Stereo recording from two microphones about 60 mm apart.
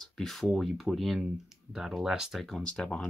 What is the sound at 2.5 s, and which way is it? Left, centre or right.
Speech, centre.